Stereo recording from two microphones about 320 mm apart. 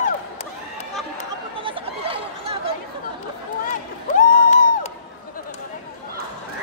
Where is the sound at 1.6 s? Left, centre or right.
Centre.